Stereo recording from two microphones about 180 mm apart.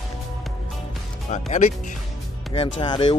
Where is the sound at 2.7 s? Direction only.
25° left (ahead or behind).